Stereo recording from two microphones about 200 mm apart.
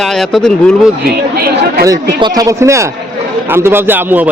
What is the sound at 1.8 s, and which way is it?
A man's voice, 15° right (ahead or behind).